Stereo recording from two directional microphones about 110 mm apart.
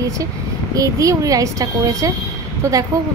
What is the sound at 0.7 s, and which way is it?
A woman's voice, 30° right (ahead or behind).